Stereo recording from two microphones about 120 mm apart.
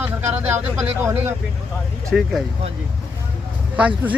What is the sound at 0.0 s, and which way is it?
Speech, 15° right (ahead or behind).